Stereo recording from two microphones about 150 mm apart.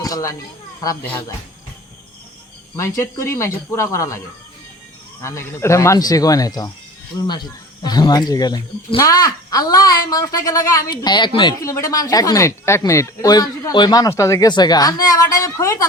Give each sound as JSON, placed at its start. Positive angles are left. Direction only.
{"t": 0.0, "sound": "speech", "side_deg": 25}
{"t": 2.7, "sound": "speech", "side_deg": 20}
{"t": 5.2, "sound": "speech", "side_deg": 20}
{"t": 7.8, "sound": "speech", "side_deg": 30}